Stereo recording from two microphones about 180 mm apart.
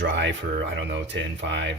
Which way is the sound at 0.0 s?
80° right.